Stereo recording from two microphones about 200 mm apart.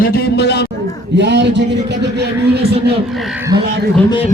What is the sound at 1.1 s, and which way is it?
A man's voice, 60° right (ahead or behind).